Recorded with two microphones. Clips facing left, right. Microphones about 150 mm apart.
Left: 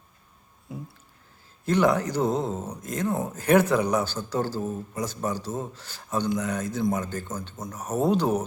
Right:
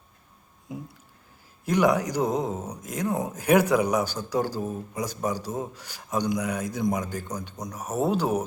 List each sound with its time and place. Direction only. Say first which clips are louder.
1.6 s speech: even; 10° right (ahead or behind)